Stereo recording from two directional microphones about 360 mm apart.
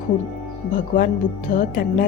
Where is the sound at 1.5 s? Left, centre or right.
Left.